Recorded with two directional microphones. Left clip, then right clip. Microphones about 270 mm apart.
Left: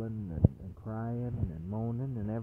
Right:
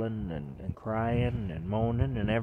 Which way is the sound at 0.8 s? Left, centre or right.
Centre.